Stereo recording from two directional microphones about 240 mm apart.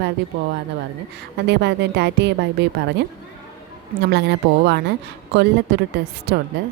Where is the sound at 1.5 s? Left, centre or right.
Right.